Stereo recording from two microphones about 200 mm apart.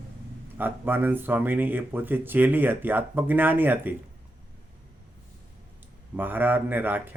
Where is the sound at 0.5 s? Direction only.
10° right (ahead or behind).